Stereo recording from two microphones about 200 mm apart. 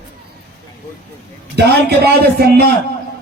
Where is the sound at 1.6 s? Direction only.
55° right (ahead or behind).